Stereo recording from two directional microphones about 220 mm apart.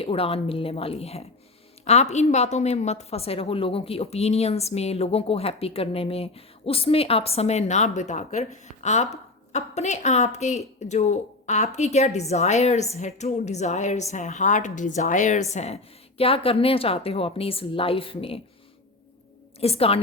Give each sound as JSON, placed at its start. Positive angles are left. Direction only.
{"t": 0.0, "sound": "a woman's voice", "side_deg": 25}
{"t": 19.5, "sound": "a woman's voice", "side_deg": 25}